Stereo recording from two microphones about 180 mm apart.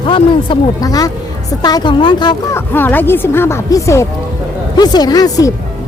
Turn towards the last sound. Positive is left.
turn(degrees=20)  # may be behind; listen again after turning